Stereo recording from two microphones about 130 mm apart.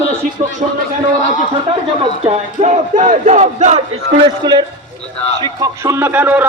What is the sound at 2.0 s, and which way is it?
Speech, 50° right (ahead or behind).